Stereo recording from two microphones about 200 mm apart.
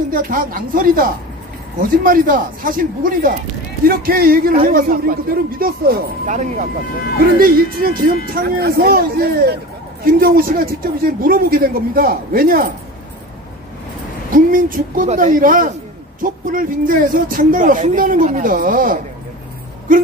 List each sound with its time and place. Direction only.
0.1 s speech: 45° right (ahead or behind)
14.3 s speech: 45° right (ahead or behind)